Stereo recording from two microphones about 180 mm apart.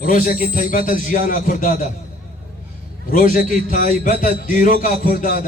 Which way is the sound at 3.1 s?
55° left (ahead or behind).